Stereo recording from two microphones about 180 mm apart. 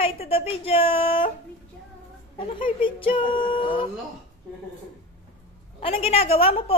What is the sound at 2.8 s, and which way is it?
Female singing, 30° left (ahead or behind).